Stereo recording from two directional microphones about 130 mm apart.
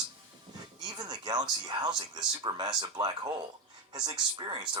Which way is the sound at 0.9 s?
30° right (ahead or behind).